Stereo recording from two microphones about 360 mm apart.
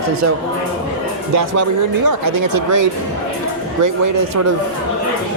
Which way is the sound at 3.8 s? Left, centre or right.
Right.